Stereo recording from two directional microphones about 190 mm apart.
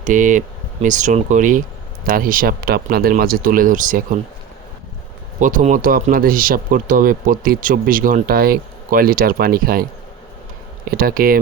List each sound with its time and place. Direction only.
0.0 s speech: 45° right (ahead or behind)
5.4 s speech: 45° right (ahead or behind)
10.9 s speech: 50° right (ahead or behind)